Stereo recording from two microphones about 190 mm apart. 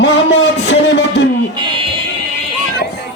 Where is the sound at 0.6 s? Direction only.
70° left (ahead or behind).